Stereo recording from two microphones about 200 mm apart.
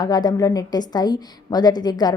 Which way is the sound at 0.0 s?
20° left (ahead or behind).